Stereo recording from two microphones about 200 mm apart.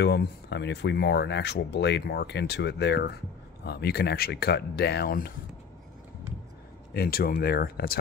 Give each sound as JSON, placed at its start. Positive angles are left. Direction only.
{"t": 0.0, "sound": "speech", "side_deg": 55}
{"t": 6.9, "sound": "speech", "side_deg": 50}